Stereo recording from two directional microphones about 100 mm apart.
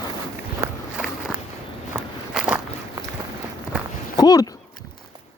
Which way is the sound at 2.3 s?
5° right (ahead or behind).